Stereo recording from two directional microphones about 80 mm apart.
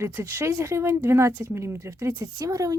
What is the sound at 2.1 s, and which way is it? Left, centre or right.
Speech, right.